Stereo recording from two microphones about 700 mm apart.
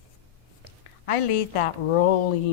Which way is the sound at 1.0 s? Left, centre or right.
Left.